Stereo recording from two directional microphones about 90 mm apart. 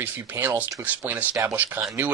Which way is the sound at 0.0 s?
20° right (ahead or behind).